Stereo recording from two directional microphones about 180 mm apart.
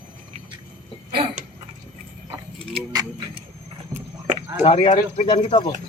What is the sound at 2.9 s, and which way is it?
Speech, 20° right (ahead or behind).